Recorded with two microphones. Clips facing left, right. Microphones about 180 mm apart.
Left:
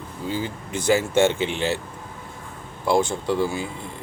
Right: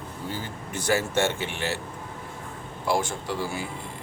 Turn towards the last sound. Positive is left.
turn(degrees=20)  # may be behind; listen again after turning